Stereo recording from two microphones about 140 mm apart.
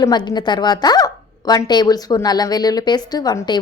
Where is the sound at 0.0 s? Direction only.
30° left (ahead or behind).